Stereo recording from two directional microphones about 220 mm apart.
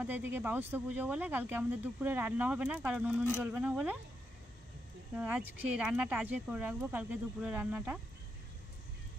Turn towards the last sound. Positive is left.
turn(degrees=-5)  # may be behind; listen again after turning